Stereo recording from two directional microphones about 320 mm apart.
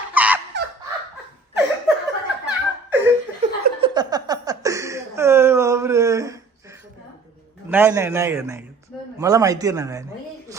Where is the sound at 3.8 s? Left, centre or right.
Centre.